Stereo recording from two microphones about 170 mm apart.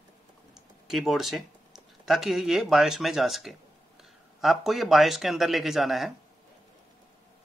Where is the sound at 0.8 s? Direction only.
Centre (ahead or behind).